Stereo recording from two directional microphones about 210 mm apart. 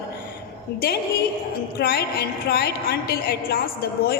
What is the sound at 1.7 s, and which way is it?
A woman's voice, 50° left (ahead or behind).